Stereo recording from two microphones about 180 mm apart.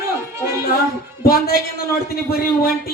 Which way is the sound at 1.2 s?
55° left (ahead or behind).